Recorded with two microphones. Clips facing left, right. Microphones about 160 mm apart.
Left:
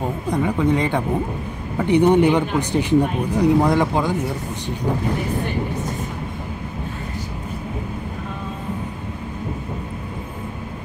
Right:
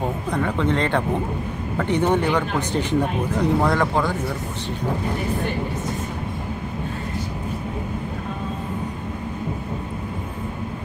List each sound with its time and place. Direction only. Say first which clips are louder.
0.3 s speech: left 4 dB; 10° left (ahead or behind)